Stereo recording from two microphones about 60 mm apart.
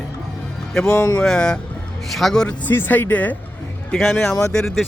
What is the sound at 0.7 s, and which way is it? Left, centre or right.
A man's voice, centre.